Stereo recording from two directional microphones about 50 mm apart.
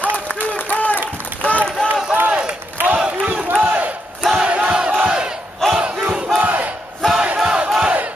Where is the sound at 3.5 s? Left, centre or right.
Right.